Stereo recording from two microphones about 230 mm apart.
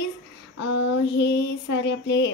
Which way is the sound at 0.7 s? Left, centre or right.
Left.